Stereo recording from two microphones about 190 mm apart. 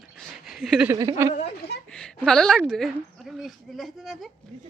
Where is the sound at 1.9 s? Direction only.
5° left (ahead or behind).